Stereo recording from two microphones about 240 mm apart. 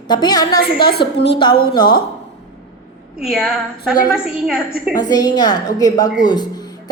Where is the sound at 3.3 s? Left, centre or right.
Centre.